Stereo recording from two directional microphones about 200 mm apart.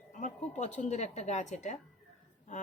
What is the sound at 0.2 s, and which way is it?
A woman's voice, 35° left (ahead or behind).